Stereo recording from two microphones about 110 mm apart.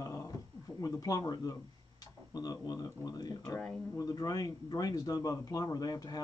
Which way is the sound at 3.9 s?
35° left (ahead or behind).